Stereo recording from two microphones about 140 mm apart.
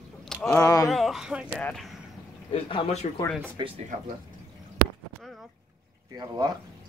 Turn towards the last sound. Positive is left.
turn(degrees=-25)  # may be behind; listen again after turning